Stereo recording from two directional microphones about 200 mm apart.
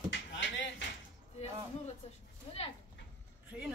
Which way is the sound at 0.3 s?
65° left (ahead or behind).